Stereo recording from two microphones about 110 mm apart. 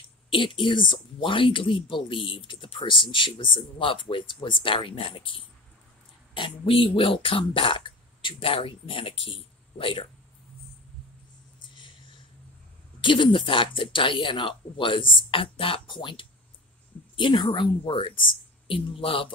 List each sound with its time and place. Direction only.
0.3 s speech: 50° left (ahead or behind)
6.3 s speech: 55° left (ahead or behind)
13.0 s speech: 50° left (ahead or behind)